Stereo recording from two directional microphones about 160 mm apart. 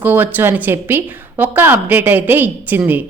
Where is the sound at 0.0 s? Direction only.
10° right (ahead or behind).